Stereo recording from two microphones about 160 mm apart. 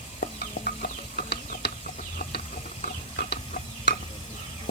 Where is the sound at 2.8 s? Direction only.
50° left (ahead or behind).